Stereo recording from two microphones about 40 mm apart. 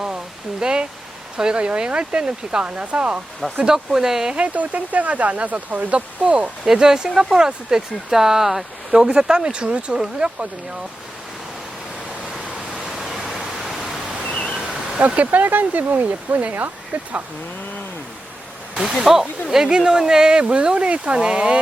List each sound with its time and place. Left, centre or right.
0.6 s speech: right
3.6 s speech: centre
4.4 s speech: right
6.7 s speech: centre
9.0 s speech: right
12.5 s pink noise: centre
14.3 s pink noise: left
15.0 s speech: right
18.7 s a sound: centre
19.0 s speech: centre; by 21.6 s right